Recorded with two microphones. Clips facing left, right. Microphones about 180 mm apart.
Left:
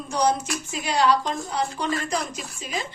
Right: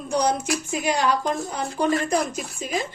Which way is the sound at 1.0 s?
50° right (ahead or behind).